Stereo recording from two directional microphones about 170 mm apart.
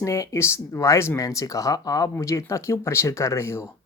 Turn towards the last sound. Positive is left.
turn(degrees=15)  # may be behind; listen again after turning